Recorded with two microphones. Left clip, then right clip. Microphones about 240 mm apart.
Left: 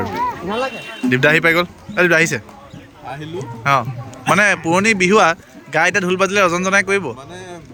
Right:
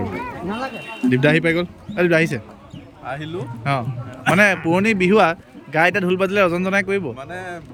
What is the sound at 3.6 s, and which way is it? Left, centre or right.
A man's voice, centre.